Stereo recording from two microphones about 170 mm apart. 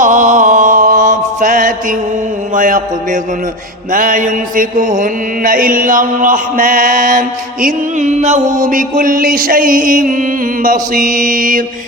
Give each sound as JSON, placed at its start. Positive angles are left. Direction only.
{"t": 0.0, "sound": "mantra", "side_deg": -50}